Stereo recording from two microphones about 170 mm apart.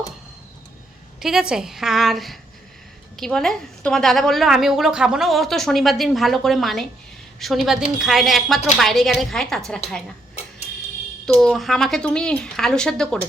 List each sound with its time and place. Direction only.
1.2 s a woman's voice: 5° right (ahead or behind)
11.3 s a woman's voice: centre (ahead or behind)